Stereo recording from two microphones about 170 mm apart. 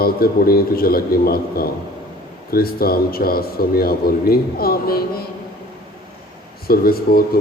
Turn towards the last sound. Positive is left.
turn(degrees=60)  # may be behind; listen again after turning